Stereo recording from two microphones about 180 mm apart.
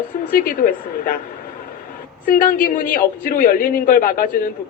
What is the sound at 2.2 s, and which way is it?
A woman's voice, 50° left (ahead or behind).